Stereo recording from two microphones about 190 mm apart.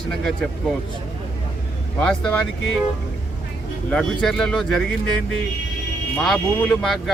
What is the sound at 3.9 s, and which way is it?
Speech, 5° left (ahead or behind).